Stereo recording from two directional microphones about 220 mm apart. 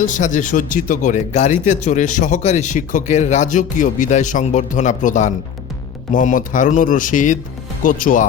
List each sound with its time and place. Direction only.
0.0 s speech: 35° left (ahead or behind)